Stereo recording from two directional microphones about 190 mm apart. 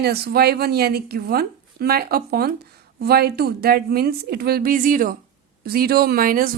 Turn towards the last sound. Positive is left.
turn(degrees=-50)  # may be behind; listen again after turning